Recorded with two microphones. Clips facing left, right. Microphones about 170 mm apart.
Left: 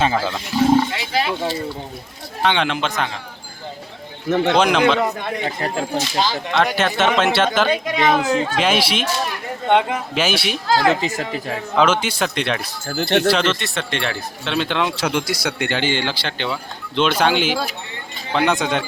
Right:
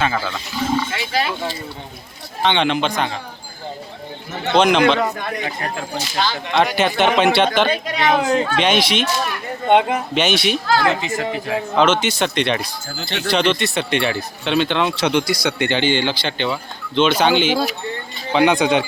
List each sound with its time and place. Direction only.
0.9 s speech: 20° left (ahead or behind)
2.4 s speech: 5° left (ahead or behind)
4.5 s a man's voice: 5° left (ahead or behind)
5.1 s speech: 25° left (ahead or behind)
6.5 s speech: centre (ahead or behind)
9.6 s speech: 15° right (ahead or behind)
10.2 s speech: 5° left (ahead or behind)
10.8 s speech: 35° left (ahead or behind)
11.8 s speech: 5° left (ahead or behind)
13.0 s speech: 65° left (ahead or behind)
13.3 s speech: centre (ahead or behind)